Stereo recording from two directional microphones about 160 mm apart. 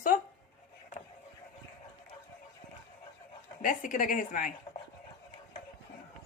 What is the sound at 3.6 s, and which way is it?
Speech, 55° left (ahead or behind).